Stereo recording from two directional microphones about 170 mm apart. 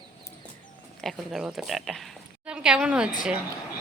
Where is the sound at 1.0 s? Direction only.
Centre (ahead or behind).